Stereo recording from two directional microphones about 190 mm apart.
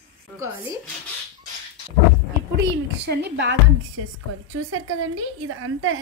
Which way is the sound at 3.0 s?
60° right (ahead or behind).